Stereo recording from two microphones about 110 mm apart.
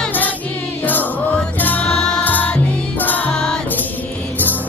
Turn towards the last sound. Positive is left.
turn(degrees=5)  # may be behind; listen again after turning